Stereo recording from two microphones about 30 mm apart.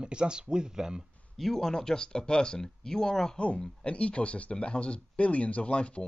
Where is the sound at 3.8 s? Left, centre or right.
Left.